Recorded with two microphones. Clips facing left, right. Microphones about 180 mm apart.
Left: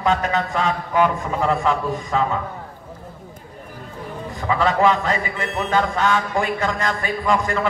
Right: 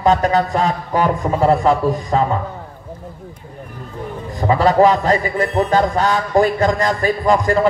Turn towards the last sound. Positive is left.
turn(degrees=-35)  # may be behind; listen again after turning